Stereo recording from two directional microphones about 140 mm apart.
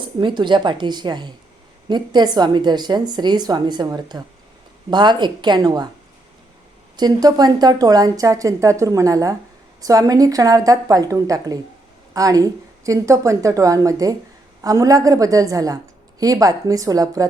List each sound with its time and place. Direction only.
0.0 s a woman's voice: 35° right (ahead or behind)
6.9 s a woman's voice: 30° right (ahead or behind)